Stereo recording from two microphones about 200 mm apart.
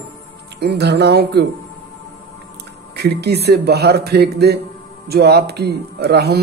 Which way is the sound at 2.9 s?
55° right (ahead or behind).